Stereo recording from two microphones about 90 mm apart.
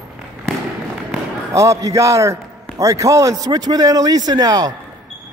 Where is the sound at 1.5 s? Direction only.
35° right (ahead or behind).